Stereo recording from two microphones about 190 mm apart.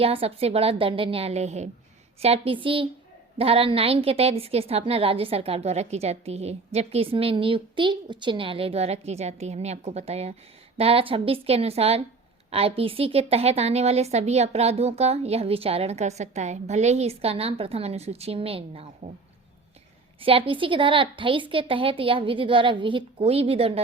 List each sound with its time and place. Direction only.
0.0 s a woman's voice: 30° right (ahead or behind)
20.2 s a woman's voice: 30° right (ahead or behind)